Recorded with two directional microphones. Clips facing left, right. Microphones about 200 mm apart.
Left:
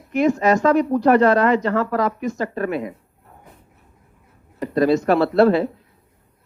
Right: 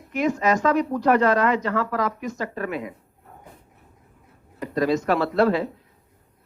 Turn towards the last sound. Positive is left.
turn(degrees=30)  # may be behind; listen again after turning